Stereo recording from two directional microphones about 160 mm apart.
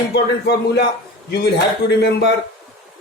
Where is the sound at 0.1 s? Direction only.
90° left.